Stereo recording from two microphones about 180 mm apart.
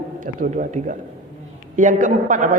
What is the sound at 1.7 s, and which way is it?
Speech, 45° right (ahead or behind).